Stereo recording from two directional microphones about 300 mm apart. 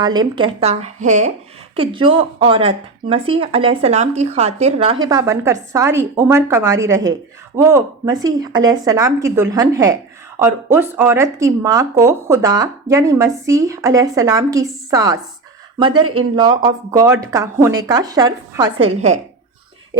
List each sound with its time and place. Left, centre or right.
0.0 s speech: centre